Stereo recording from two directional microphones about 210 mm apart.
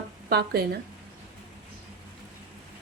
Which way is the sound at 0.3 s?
50° right (ahead or behind).